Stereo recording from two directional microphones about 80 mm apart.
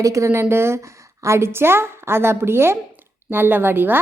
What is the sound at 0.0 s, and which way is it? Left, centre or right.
A woman's voice, right.